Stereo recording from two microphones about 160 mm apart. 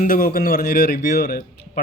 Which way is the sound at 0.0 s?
65° left (ahead or behind).